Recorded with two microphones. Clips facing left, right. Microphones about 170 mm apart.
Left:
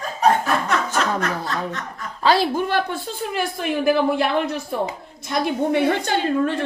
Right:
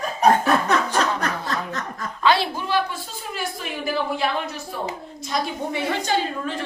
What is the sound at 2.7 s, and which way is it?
A woman's voice, 55° left (ahead or behind).